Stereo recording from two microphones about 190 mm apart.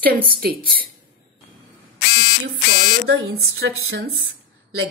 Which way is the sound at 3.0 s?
55° right (ahead or behind).